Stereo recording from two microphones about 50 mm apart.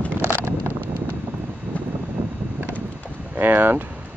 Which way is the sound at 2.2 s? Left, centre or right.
Right.